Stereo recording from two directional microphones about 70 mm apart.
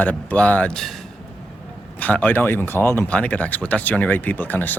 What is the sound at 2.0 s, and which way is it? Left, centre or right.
Speech, left.